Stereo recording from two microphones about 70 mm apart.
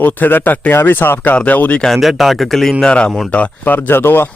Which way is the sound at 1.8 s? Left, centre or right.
Centre.